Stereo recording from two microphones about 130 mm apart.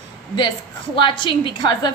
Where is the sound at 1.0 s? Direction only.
40° left (ahead or behind).